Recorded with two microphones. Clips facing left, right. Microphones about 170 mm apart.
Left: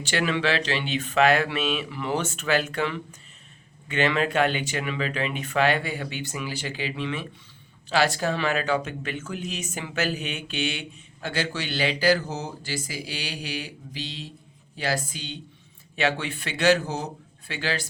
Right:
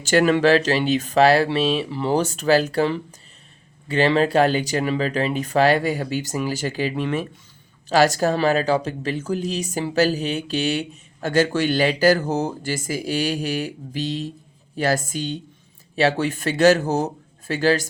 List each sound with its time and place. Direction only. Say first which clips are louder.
0.0 s speech: right 9 dB; 45° right (ahead or behind)